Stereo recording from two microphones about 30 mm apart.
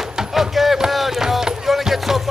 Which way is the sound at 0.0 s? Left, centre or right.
Centre.